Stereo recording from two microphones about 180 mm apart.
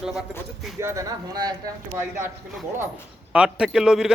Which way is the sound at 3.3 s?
5° right (ahead or behind).